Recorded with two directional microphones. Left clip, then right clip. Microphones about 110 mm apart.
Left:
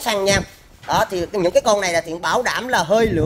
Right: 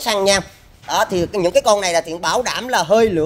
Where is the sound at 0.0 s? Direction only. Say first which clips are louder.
Right 2 dB; 35° right (ahead or behind).